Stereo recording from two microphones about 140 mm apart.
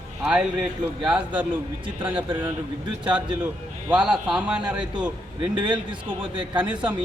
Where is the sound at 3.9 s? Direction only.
5° right (ahead or behind).